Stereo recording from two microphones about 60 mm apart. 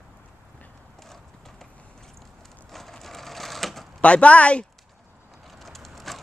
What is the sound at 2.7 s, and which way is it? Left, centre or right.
Sewing machine, centre.